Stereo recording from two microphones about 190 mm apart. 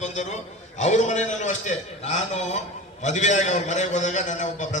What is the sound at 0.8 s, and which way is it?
A man's voice, 40° left (ahead or behind).